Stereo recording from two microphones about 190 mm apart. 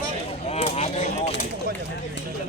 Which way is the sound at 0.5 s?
35° left (ahead or behind).